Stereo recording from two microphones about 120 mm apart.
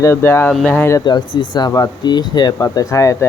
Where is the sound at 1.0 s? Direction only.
40° left (ahead or behind).